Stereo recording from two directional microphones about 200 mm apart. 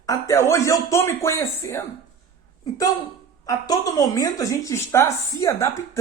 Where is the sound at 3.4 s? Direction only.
15° left (ahead or behind).